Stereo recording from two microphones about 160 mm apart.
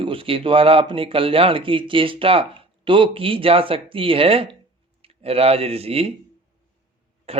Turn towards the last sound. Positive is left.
turn(degrees=-35)  # may be behind; listen again after turning